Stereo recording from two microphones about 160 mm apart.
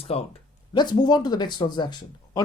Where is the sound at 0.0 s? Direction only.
40° left (ahead or behind).